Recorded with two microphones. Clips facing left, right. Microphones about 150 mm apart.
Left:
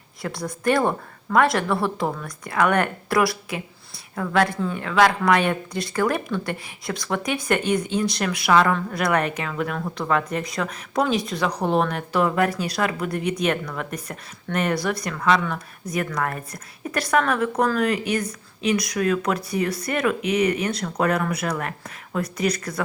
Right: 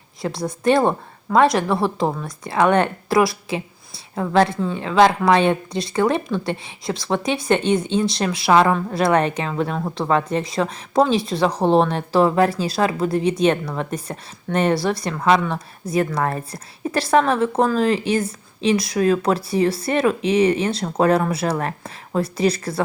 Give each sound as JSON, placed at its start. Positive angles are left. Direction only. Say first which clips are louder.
{"t": 0.2, "sound": "a woman's voice", "louder": "right 4 dB", "side_deg": -20}